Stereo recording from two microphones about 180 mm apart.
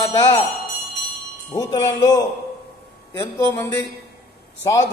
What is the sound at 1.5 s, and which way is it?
Speech, 20° left (ahead or behind).